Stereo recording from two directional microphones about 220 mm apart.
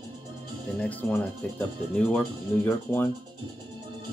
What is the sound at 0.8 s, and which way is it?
Speech, 5° left (ahead or behind).